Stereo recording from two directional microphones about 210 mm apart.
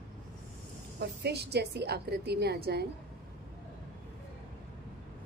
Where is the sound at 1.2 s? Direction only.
50° right (ahead or behind).